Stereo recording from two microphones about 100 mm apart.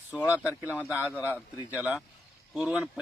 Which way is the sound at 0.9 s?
15° right (ahead or behind).